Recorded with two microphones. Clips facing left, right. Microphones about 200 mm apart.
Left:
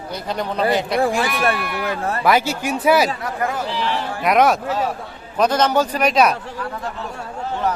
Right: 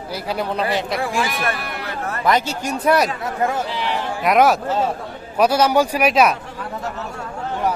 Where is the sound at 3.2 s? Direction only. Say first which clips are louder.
Right 2 dB; 25° right (ahead or behind).